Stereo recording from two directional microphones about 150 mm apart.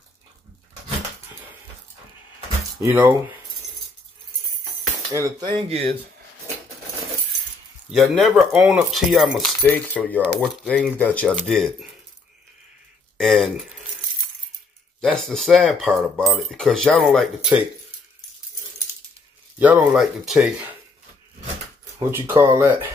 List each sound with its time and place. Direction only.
2.7 s speech: 15° right (ahead or behind)
5.1 s speech: 25° right (ahead or behind)
7.9 s speech: centre (ahead or behind)
9.6 s speech: 10° left (ahead or behind)
13.2 s speech: centre (ahead or behind)
15.0 s speech: 5° left (ahead or behind)
19.6 s speech: 10° right (ahead or behind)
22.1 s speech: 15° right (ahead or behind)